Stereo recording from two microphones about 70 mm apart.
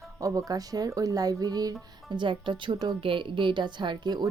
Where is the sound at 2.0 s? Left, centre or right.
Right.